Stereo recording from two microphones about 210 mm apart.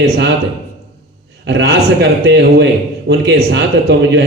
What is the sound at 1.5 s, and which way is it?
A man's voice, 55° right (ahead or behind).